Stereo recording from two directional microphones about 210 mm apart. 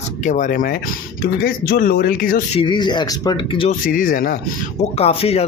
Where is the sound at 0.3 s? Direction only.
40° left (ahead or behind).